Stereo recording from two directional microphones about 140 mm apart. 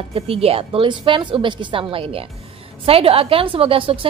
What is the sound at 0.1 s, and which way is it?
A woman's voice, 45° right (ahead or behind).